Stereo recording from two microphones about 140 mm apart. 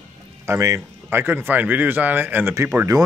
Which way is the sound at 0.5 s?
20° right (ahead or behind).